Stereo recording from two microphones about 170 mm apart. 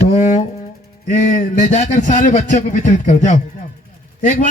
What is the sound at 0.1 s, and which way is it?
Music, 45° left (ahead or behind).